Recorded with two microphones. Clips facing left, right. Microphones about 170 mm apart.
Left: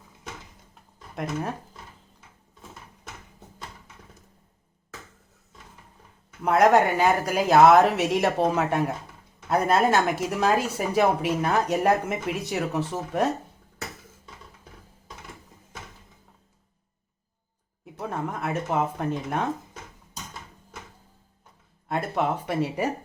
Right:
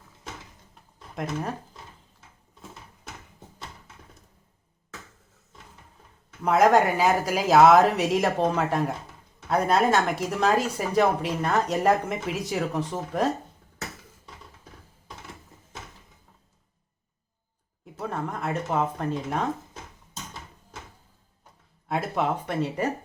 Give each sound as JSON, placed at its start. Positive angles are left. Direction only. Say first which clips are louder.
{"t": 1.1, "sound": "speech", "louder": "left 1 dB", "side_deg": 0}
{"t": 6.4, "sound": "speech", "louder": "even", "side_deg": 0}
{"t": 17.8, "sound": "speech", "louder": "even", "side_deg": 0}
{"t": 21.8, "sound": "speech", "louder": "even", "side_deg": 0}